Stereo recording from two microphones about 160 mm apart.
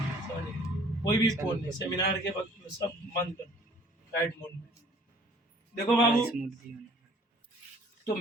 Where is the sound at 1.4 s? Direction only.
10° right (ahead or behind).